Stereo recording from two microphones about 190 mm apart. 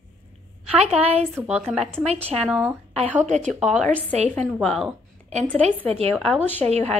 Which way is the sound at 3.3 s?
40° right (ahead or behind).